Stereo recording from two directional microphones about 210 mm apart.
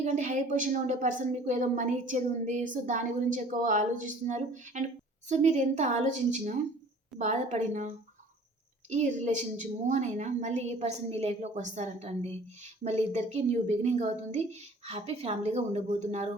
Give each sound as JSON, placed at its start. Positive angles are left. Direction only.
{"t": 0.0, "sound": "a woman's voice", "side_deg": -35}